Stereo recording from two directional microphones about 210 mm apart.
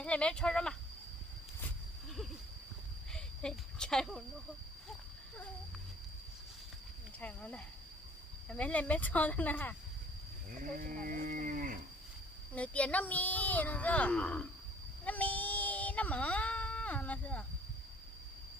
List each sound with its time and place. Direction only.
0.0 s speech: 5° left (ahead or behind)
3.1 s a sound: 5° left (ahead or behind)
7.2 s speech: 5° left (ahead or behind)
10.6 s moo: 40° right (ahead or behind)
12.5 s speech: 5° left (ahead or behind)
15.0 s a sound: 5° left (ahead or behind)